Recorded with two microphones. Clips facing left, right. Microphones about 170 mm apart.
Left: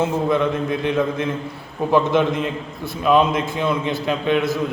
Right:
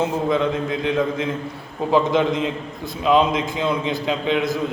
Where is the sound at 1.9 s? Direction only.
15° right (ahead or behind).